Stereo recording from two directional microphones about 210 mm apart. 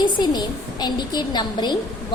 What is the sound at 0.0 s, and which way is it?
A woman's voice, 20° left (ahead or behind).